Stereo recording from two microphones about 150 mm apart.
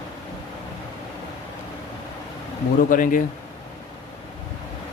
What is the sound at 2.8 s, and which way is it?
Speech, 60° left (ahead or behind).